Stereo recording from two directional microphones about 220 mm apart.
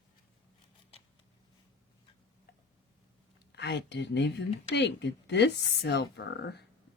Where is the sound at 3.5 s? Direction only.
50° left (ahead or behind).